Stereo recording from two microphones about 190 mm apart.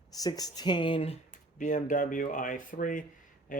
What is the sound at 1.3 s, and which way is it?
Speech, 40° left (ahead or behind).